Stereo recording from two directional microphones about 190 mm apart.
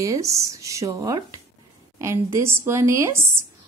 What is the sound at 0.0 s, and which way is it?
A woman's voice, 15° right (ahead or behind).